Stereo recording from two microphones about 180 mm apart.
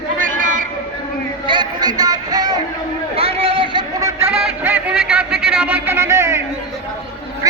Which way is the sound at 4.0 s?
15° right (ahead or behind).